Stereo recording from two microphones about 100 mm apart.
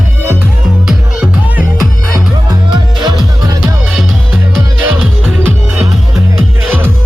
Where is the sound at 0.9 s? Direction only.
10° right (ahead or behind).